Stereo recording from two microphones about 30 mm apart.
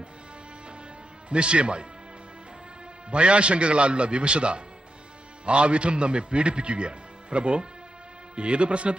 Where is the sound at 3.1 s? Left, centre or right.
Right.